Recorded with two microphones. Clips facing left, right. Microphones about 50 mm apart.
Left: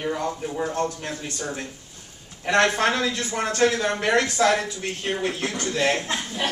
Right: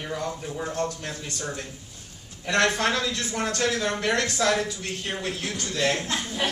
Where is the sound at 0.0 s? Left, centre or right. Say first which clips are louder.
Left 4 dB; centre.